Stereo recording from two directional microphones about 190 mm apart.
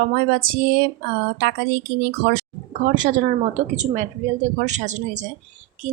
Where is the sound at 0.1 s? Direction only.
50° right (ahead or behind).